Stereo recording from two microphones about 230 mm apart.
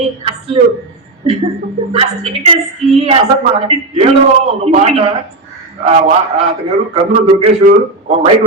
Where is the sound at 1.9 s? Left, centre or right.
Right.